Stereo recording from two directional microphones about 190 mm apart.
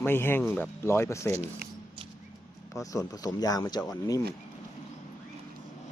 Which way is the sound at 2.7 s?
15° left (ahead or behind).